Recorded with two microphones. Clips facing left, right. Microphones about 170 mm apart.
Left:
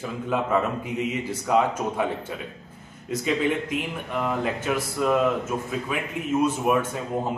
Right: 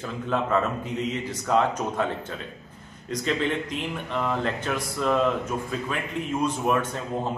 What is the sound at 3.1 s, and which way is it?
Speech, 10° left (ahead or behind).